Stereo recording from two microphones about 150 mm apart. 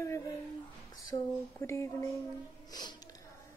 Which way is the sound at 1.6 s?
20° left (ahead or behind).